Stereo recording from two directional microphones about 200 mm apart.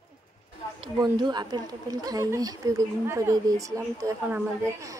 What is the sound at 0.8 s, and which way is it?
Speech, 20° right (ahead or behind).